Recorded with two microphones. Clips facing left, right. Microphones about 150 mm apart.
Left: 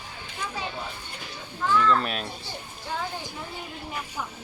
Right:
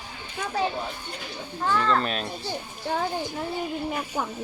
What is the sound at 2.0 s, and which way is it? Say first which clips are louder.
Speech: right 2 dB; 5° left (ahead or behind).